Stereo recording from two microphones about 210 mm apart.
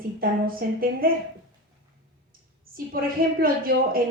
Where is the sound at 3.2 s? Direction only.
45° right (ahead or behind).